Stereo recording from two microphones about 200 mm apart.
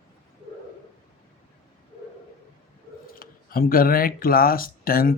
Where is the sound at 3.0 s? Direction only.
45° left (ahead or behind).